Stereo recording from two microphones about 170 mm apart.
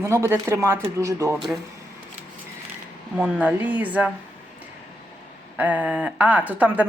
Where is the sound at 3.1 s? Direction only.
5° right (ahead or behind).